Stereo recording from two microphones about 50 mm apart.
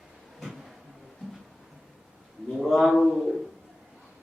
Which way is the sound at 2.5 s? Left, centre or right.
Centre.